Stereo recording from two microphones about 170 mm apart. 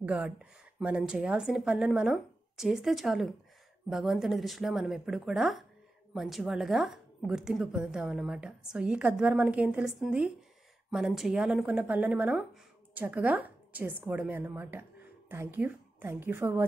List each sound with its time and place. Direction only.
0.0 s a woman's voice: 5° right (ahead or behind)